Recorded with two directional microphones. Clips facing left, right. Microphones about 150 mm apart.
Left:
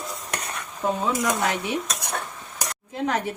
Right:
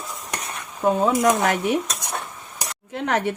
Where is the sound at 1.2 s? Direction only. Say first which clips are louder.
Right 5 dB; 50° right (ahead or behind).